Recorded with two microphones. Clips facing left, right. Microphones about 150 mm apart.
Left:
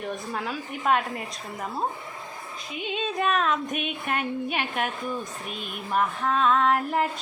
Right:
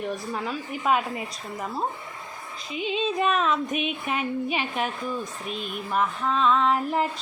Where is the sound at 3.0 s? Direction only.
Centre (ahead or behind).